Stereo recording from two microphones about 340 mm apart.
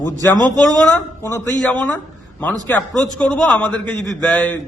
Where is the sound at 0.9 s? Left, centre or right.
Centre.